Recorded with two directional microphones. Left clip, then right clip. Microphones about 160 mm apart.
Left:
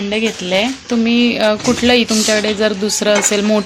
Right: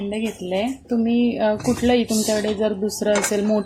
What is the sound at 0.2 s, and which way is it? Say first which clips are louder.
Speech: left 9 dB; centre (ahead or behind).